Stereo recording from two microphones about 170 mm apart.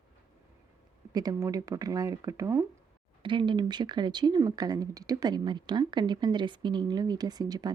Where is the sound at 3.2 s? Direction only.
30° right (ahead or behind).